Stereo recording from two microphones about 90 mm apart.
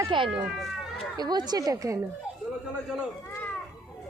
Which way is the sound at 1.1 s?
50° right (ahead or behind).